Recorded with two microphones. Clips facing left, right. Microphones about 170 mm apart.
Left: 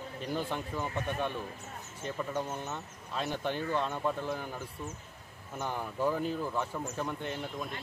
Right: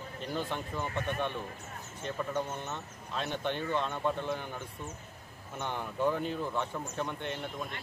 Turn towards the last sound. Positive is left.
turn(degrees=5)  # may be behind; listen again after turning